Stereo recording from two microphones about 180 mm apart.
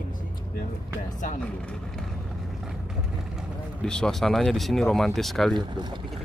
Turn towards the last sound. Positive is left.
turn(degrees=-25)  # may be behind; listen again after turning